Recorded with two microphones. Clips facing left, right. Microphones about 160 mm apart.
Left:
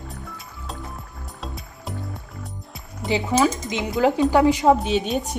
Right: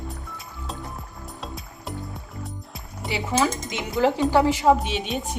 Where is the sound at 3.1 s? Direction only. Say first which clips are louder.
Left 4 dB; 20° left (ahead or behind).